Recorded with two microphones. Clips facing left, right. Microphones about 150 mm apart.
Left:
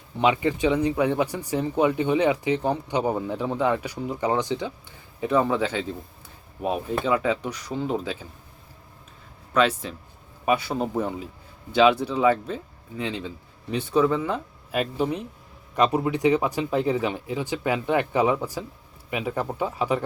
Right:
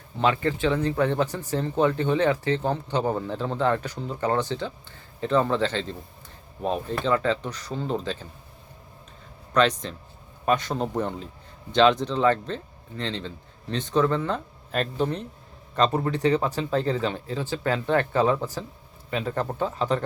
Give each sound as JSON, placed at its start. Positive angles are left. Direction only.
{"t": 0.2, "sound": "speech", "side_deg": 15}
{"t": 9.5, "sound": "speech", "side_deg": 5}